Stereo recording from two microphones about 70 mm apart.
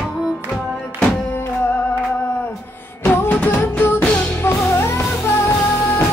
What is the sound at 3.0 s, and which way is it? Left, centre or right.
Music, left.